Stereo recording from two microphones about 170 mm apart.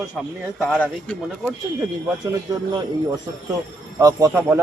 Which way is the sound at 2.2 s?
20° right (ahead or behind).